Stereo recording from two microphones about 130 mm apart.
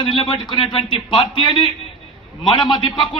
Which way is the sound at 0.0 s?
35° left (ahead or behind).